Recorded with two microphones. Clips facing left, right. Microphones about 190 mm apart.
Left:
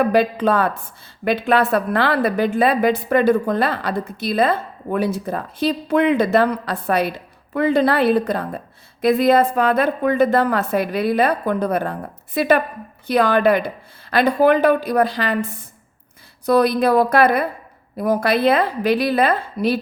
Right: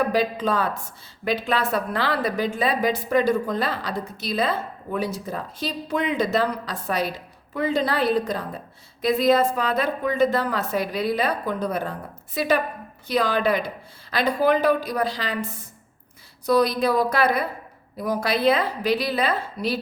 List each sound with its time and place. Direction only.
0.1 s a woman's voice: 60° left (ahead or behind)
16.5 s a woman's voice: 55° left (ahead or behind)